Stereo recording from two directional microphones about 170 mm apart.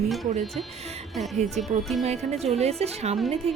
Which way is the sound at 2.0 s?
40° right (ahead or behind).